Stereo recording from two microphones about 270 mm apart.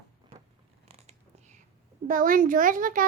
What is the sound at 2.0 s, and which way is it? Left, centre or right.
A woman's voice, right.